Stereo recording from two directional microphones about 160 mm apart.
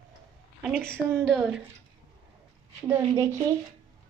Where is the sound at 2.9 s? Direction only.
15° right (ahead or behind).